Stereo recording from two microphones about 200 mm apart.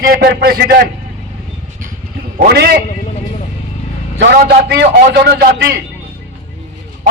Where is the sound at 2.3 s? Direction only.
50° right (ahead or behind).